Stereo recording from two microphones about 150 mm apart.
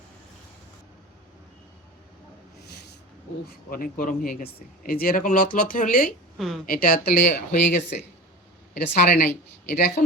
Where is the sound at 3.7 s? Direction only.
70° left (ahead or behind); by 7.6 s 90° left.